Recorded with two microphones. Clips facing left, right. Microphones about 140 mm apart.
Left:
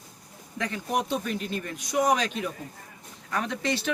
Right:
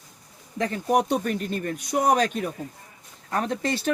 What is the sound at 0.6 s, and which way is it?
Speech, 40° right (ahead or behind).